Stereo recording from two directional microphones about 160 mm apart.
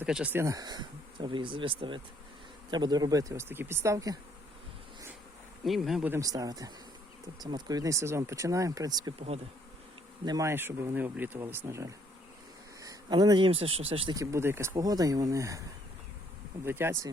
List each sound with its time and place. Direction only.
0.0 s speech: 5° right (ahead or behind)
5.6 s speech: centre (ahead or behind)
6.1 s speech: 20° right (ahead or behind)
10.2 s speech: 20° right (ahead or behind)
14.2 s speech: 20° right (ahead or behind)
16.6 s speech: 15° right (ahead or behind)